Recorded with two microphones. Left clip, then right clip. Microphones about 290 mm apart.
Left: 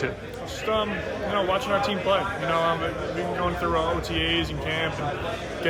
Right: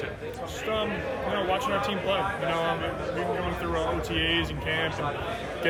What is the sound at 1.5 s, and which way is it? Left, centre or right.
Speech, centre.